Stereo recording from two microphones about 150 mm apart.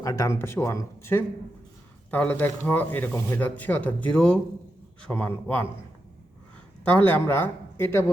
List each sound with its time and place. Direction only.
0.0 s speech: 20° left (ahead or behind)
6.8 s speech: 10° left (ahead or behind)